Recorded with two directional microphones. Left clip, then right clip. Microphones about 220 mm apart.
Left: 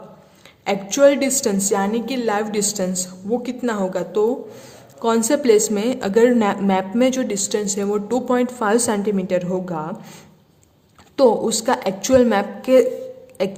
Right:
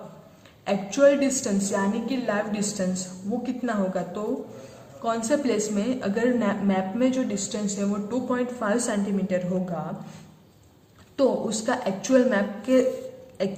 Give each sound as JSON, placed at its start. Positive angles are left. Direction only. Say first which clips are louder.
{"t": 0.6, "sound": "a woman's voice", "louder": "left 5 dB", "side_deg": 50}
{"t": 11.2, "sound": "a woman's voice", "louder": "left 8 dB", "side_deg": 50}